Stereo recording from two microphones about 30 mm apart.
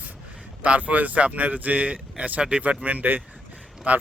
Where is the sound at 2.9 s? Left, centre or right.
Right.